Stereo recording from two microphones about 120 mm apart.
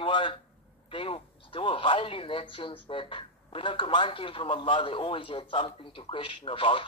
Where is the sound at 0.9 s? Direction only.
45° left (ahead or behind).